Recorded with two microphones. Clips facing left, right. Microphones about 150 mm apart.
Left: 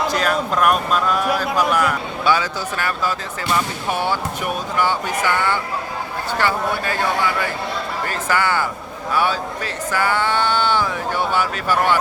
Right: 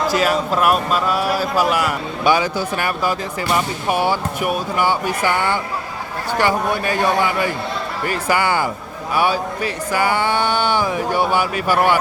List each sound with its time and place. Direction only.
0.1 s a man's voice: 5° right (ahead or behind)